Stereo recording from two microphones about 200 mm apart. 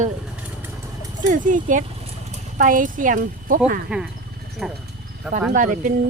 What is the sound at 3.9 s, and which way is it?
Speech, 5° right (ahead or behind).